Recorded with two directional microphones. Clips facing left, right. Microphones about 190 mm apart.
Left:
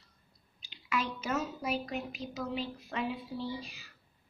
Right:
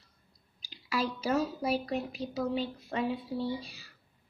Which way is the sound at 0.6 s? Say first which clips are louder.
Right 2 dB; 35° right (ahead or behind).